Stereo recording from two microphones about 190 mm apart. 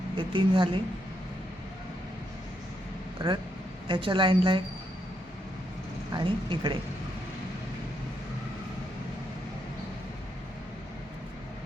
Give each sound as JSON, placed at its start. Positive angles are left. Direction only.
{"t": 0.2, "sound": "a woman's voice", "side_deg": -25}
{"t": 3.8, "sound": "a woman's voice", "side_deg": -25}
{"t": 6.1, "sound": "a woman's voice", "side_deg": -25}